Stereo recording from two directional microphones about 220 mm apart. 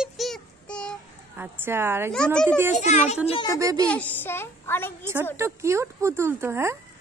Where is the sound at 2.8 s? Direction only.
30° left (ahead or behind).